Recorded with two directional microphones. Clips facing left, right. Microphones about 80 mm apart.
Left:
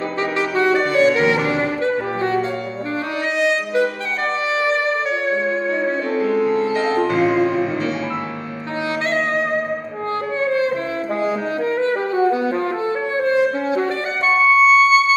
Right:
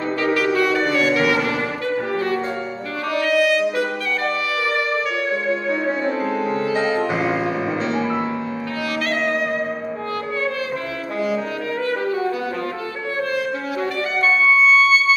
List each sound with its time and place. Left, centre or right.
0.2 s music: left
5.3 s saxophone: left
7.1 s music: centre
10.4 s saxophone: left
13.2 s music: left